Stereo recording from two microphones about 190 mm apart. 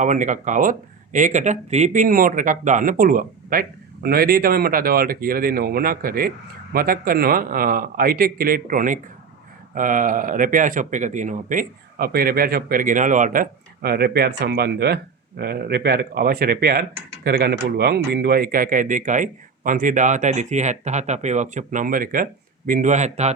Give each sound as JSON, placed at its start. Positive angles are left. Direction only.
{"t": 0.0, "sound": "speech", "side_deg": -40}